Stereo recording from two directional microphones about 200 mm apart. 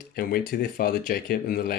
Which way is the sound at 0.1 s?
45° left (ahead or behind).